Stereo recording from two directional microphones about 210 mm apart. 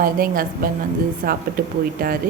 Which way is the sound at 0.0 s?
45° right (ahead or behind).